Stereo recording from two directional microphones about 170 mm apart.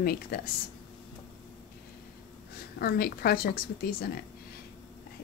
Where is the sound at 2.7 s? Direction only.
65° left (ahead or behind).